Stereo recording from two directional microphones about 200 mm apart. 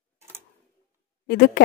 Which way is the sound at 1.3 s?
50° left (ahead or behind).